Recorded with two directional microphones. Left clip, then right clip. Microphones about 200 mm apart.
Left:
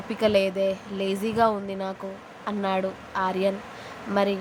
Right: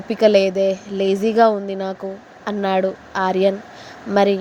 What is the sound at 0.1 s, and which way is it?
A woman's voice, 25° right (ahead or behind).